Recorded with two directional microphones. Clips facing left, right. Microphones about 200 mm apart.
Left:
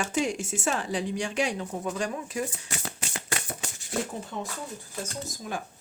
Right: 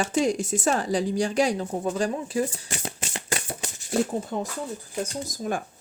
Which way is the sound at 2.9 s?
25° right (ahead or behind).